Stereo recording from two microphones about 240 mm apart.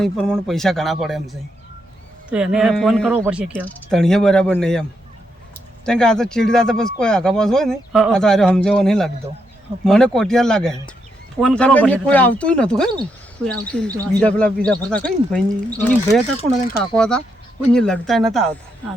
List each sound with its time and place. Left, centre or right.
0.0 s speech: centre